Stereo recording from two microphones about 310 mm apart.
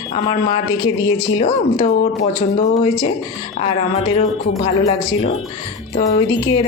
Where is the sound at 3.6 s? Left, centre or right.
Centre.